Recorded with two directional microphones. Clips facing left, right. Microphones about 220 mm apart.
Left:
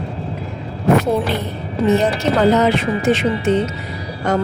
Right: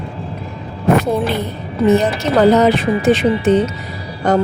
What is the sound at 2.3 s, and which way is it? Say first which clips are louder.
A woman's voice: right 4 dB; 40° right (ahead or behind).